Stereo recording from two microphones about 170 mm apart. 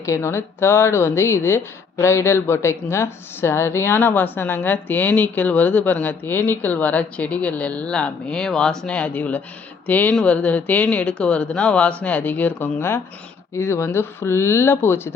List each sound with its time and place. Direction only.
0.0 s a woman's voice: 15° left (ahead or behind)